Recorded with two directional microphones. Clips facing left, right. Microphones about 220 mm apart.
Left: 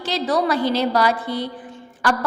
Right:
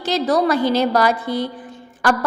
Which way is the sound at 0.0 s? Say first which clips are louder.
Right 3 dB; 45° right (ahead or behind).